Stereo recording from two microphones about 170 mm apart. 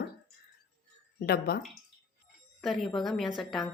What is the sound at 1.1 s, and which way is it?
Speech, 65° left (ahead or behind).